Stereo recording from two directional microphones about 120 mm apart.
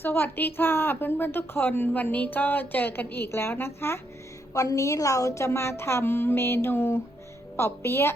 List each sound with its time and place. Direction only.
0.0 s a woman's voice: 15° left (ahead or behind)